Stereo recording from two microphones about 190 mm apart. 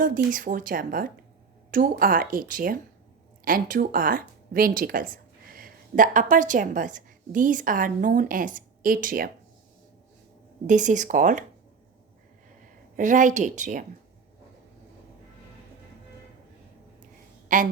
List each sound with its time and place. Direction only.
0.0 s speech: 45° right (ahead or behind)
10.7 s speech: 40° right (ahead or behind)
13.0 s speech: 40° right (ahead or behind)
17.5 s a woman's voice: 45° right (ahead or behind)